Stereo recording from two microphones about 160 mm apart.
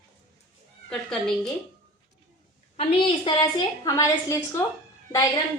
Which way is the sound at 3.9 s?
20° left (ahead or behind).